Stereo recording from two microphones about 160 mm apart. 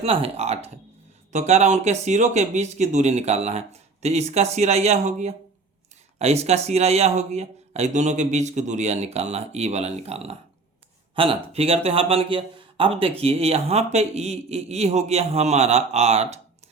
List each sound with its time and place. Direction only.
0.0 s a man's voice: 35° right (ahead or behind)